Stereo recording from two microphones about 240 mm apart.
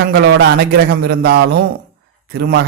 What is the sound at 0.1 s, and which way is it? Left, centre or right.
A man's voice, right.